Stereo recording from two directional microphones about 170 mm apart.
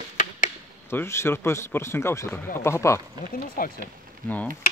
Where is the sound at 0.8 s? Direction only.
15° left (ahead or behind).